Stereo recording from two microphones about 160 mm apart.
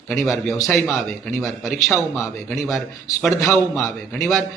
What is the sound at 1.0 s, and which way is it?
A man's voice, 10° left (ahead or behind).